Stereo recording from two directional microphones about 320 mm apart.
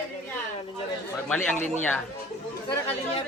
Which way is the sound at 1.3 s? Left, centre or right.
Centre.